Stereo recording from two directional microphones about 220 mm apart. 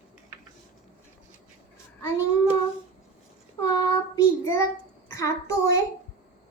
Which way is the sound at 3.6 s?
20° left (ahead or behind).